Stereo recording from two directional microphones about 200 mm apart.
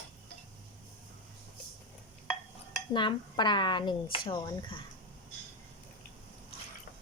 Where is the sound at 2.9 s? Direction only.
25° left (ahead or behind).